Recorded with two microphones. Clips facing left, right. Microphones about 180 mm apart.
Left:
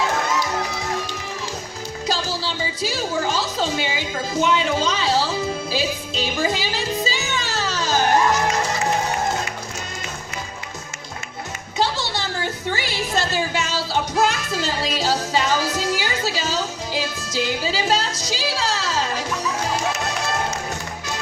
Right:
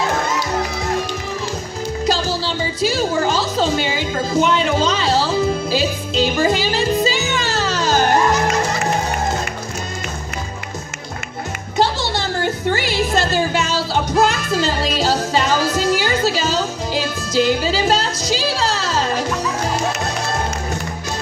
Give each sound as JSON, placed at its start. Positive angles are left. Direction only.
{"t": 2.1, "sound": "music", "side_deg": -90}
{"t": 11.8, "sound": "music", "side_deg": -60}